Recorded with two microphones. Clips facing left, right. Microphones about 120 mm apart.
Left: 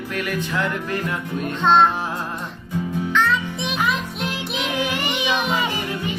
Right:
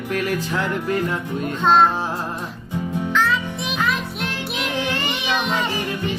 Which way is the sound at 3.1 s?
Centre (ahead or behind).